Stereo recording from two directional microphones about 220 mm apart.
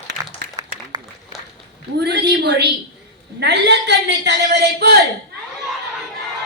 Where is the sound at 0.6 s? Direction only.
15° right (ahead or behind).